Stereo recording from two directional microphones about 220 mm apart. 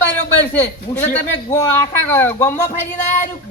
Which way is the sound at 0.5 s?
10° left (ahead or behind).